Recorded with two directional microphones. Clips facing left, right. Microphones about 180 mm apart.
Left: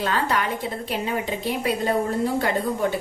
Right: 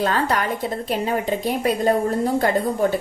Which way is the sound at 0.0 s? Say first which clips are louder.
Right 3 dB; 40° right (ahead or behind).